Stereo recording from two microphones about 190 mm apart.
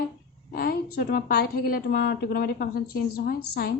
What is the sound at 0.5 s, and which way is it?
A woman's voice, 55° left (ahead or behind).